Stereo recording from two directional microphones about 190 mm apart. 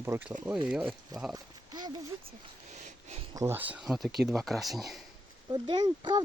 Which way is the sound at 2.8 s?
35° right (ahead or behind).